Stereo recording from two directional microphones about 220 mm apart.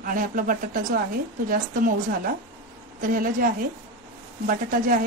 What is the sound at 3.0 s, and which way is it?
A woman's voice, 40° right (ahead or behind).